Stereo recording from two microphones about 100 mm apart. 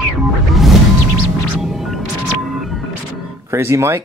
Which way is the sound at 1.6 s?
5° right (ahead or behind).